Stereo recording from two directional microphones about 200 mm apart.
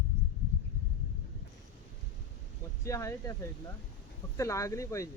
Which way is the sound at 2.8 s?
15° left (ahead or behind).